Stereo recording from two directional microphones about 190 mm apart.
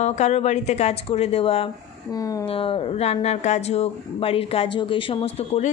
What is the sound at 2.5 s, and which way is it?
Speech, 30° left (ahead or behind).